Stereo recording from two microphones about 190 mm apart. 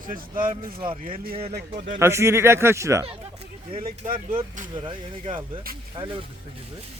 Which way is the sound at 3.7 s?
30° right (ahead or behind).